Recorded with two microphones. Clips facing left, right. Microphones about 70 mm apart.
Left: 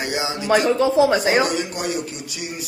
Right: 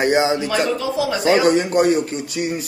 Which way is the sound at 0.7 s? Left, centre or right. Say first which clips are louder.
Left 5 dB; left.